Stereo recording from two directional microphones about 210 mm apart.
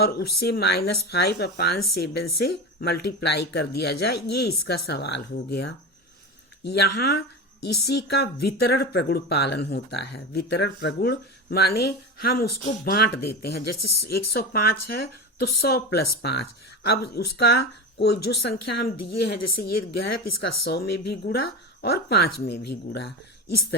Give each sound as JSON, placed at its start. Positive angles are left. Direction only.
{"t": 0.0, "sound": "speech", "side_deg": 45}